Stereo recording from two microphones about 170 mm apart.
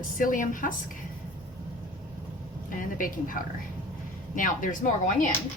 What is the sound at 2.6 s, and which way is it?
Speech, 50° left (ahead or behind).